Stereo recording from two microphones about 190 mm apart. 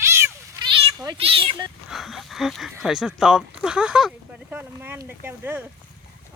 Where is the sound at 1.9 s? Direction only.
Centre (ahead or behind).